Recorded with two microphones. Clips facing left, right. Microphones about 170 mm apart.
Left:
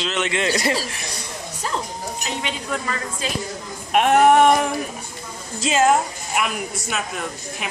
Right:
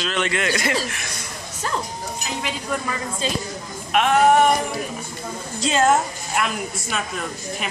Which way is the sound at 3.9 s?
50° left (ahead or behind).